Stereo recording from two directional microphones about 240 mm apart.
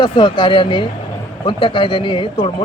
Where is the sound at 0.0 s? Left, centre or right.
Centre.